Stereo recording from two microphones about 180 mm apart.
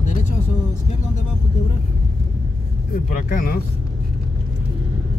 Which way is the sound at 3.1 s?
50° left (ahead or behind).